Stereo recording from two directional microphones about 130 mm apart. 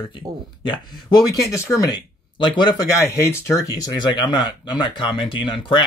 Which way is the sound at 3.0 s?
25° left (ahead or behind).